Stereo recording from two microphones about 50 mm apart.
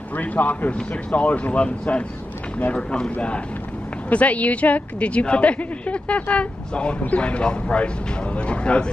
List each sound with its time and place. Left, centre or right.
0.1 s a woman's voice: left